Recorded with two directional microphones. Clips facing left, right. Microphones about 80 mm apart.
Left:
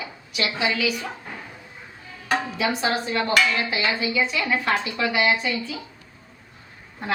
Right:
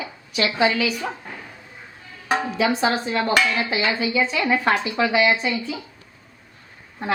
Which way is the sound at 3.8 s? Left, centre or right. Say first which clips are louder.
Right 3 dB; right.